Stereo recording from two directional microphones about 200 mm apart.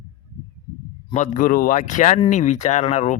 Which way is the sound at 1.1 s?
40° left (ahead or behind).